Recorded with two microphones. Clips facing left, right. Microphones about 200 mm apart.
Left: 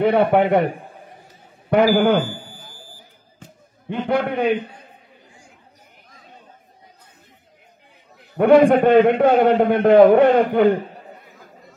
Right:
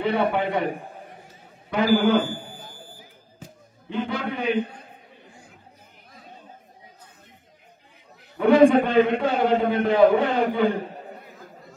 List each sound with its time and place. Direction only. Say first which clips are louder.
0.0 s a man's voice: left 7 dB; 60° left (ahead or behind)
1.7 s a man's voice: left 4 dB; 55° left (ahead or behind)
3.9 s a man's voice: left 6 dB; 55° left (ahead or behind)
8.4 s a man's voice: left 3 dB; 60° left (ahead or behind)